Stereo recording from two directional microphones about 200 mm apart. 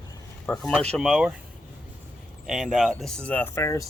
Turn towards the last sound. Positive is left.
turn(degrees=15)  # may be behind; listen again after turning